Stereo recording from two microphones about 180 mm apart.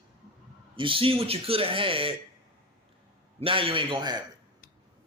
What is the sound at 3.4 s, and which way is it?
Speech, 30° right (ahead or behind).